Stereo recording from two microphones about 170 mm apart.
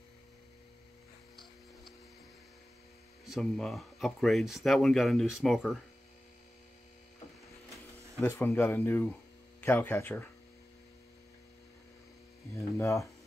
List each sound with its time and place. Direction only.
1.3 s a sound: centre (ahead or behind)
3.3 s speech: centre (ahead or behind)
8.2 s speech: 15° left (ahead or behind)
12.5 s speech: 15° left (ahead or behind)